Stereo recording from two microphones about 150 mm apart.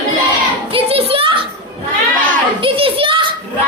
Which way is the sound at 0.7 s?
40° right (ahead or behind).